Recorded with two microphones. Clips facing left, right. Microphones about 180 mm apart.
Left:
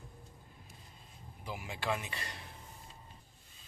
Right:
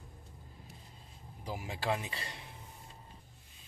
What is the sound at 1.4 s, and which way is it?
Speech, 35° right (ahead or behind).